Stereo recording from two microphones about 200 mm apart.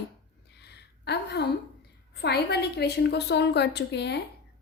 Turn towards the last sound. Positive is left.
turn(degrees=55)  # may be behind; listen again after turning